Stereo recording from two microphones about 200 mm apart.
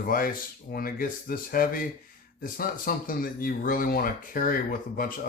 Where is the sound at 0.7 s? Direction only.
45° left (ahead or behind).